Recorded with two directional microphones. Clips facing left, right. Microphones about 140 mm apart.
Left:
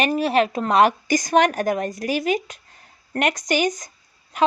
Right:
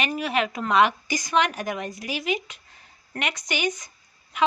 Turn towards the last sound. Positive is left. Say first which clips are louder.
# left 6 dB
turn(degrees=40)  # may be behind; listen again after turning